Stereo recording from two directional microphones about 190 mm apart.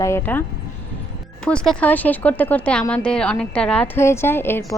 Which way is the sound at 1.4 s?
5° left (ahead or behind).